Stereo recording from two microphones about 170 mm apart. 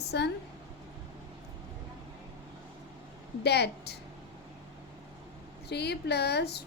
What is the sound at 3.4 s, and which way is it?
Speech, 75° left (ahead or behind).